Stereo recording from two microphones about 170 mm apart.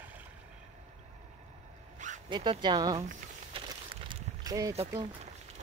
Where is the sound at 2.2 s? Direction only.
25° right (ahead or behind).